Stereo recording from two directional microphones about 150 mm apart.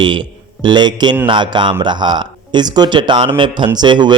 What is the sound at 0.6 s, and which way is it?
Speech, 30° right (ahead or behind).